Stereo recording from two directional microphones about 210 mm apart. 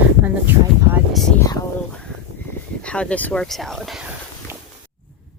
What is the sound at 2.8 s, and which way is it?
Speech, 5° left (ahead or behind).